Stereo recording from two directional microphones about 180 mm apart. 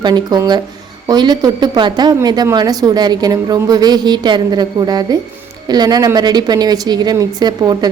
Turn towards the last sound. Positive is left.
turn(degrees=-25)  # may be behind; listen again after turning